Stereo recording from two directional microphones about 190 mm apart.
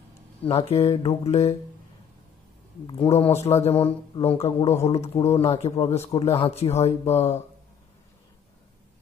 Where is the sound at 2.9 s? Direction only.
25° left (ahead or behind).